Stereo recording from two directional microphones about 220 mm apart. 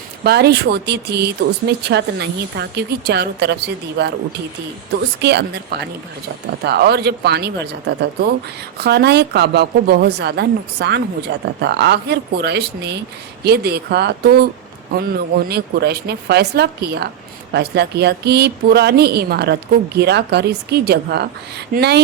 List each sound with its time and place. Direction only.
0.3 s speech: 45° right (ahead or behind)
5.2 s speech: 50° right (ahead or behind)